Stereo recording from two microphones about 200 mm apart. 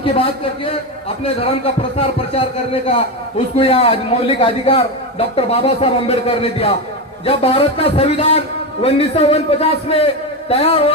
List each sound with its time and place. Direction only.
0.0 s a man's voice: 30° left (ahead or behind)